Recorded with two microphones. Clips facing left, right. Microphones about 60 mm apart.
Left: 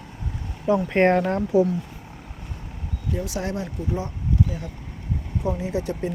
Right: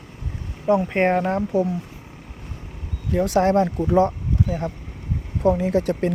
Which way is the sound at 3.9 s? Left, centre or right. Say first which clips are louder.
Right 11 dB; right.